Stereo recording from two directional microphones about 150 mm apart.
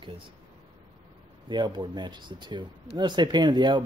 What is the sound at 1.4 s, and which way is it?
Speech, 30° right (ahead or behind).